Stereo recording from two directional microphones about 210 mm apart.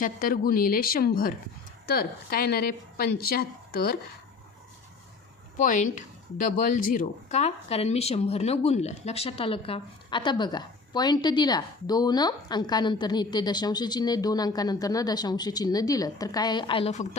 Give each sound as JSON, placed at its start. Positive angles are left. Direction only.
{"t": 0.0, "sound": "a woman's voice", "side_deg": 40}
{"t": 5.5, "sound": "a woman's voice", "side_deg": 35}